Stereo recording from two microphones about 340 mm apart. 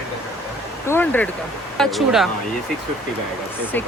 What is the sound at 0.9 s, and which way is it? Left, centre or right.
Speech, centre.